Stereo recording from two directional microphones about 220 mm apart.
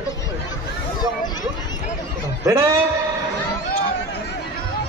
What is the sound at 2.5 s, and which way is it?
Speech, 15° right (ahead or behind).